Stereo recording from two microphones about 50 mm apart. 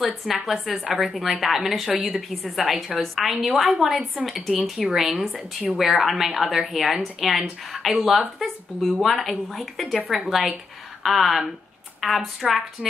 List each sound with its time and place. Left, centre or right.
0.0 s a woman's voice: centre
9.9 s a woman's voice: centre
10.2 s a woman's voice: centre